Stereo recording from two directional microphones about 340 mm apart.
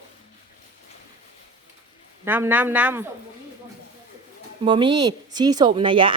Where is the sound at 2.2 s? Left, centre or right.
Centre.